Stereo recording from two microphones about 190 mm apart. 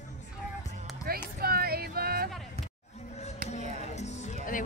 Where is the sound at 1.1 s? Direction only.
55° right (ahead or behind).